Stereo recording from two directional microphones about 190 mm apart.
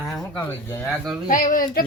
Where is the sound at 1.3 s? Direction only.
45° left (ahead or behind).